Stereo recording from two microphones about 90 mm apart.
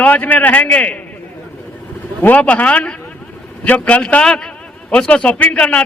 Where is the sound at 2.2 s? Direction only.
15° left (ahead or behind).